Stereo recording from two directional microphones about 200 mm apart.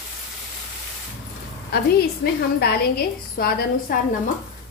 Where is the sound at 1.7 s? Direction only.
50° left (ahead or behind).